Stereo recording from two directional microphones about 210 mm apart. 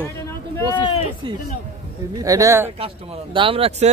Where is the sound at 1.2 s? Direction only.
25° right (ahead or behind).